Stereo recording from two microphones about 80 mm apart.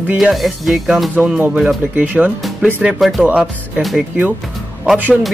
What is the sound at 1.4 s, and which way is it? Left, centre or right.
Speech, centre.